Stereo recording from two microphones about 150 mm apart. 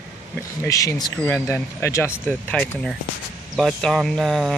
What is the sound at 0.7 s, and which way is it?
Speech, 20° left (ahead or behind).